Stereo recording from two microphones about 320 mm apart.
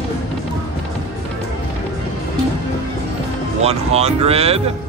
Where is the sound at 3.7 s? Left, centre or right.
Centre.